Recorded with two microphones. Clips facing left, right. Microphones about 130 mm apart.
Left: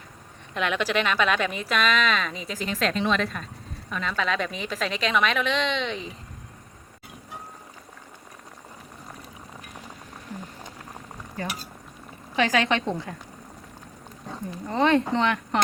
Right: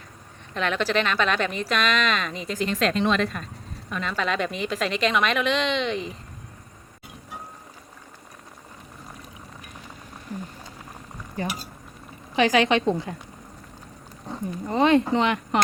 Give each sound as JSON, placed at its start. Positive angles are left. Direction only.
{"t": 0.5, "sound": "speech", "side_deg": 10}
{"t": 11.4, "sound": "a woman's voice", "side_deg": -20}
{"t": 14.7, "sound": "speech", "side_deg": -15}